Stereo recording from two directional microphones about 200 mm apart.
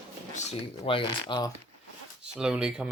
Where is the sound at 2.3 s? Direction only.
5° right (ahead or behind).